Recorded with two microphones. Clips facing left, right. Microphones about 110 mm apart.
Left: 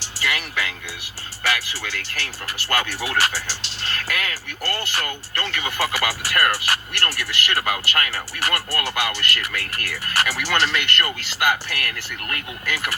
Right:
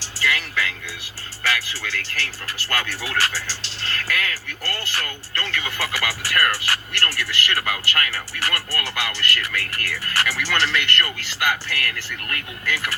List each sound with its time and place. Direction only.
0.0 s music: 15° left (ahead or behind)
1.5 s speech: 15° left (ahead or behind)